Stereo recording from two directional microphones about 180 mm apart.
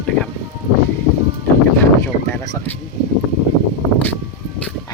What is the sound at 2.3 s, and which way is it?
Speech, 15° left (ahead or behind).